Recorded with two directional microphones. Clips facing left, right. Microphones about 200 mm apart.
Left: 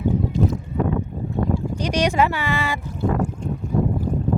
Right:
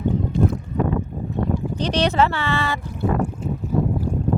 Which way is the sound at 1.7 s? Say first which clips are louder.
Right 1 dB; 10° left (ahead or behind).